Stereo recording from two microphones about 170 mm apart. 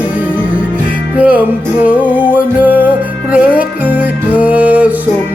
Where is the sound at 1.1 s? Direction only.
10° right (ahead or behind).